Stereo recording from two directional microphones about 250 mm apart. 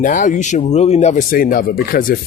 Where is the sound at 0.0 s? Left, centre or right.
Left.